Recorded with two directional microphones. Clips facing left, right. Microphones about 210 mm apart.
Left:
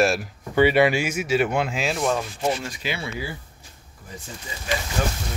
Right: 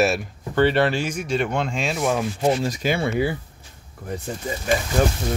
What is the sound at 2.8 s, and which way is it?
Speech, 50° right (ahead or behind).